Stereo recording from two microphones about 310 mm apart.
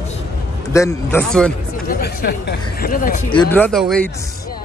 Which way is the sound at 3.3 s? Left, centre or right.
Centre.